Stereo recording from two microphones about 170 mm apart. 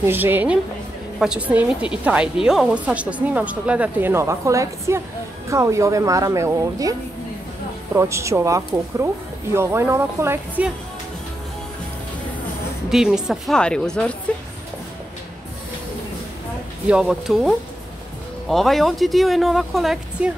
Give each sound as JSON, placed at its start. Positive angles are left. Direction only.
{"t": 0.0, "sound": "a woman's voice", "side_deg": -10}
{"t": 12.9, "sound": "speech", "side_deg": -5}
{"t": 16.9, "sound": "speech", "side_deg": 0}